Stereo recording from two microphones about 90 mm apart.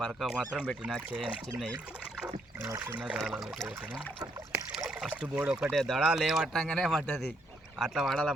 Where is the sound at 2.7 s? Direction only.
20° right (ahead or behind); by 3.5 s 5° right (ahead or behind).